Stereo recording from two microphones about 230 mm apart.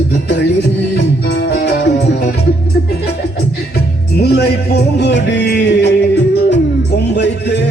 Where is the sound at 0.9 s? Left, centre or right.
Left.